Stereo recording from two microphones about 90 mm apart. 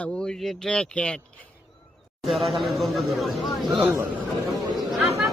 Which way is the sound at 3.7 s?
25° right (ahead or behind).